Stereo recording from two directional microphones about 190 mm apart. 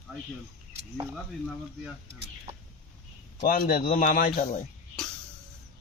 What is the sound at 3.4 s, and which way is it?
A man's voice, 50° left (ahead or behind).